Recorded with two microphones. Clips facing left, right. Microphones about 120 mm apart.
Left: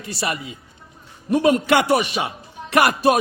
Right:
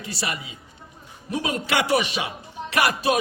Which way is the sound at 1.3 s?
60° left (ahead or behind).